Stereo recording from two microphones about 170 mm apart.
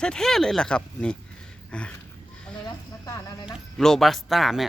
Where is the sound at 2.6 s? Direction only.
20° left (ahead or behind).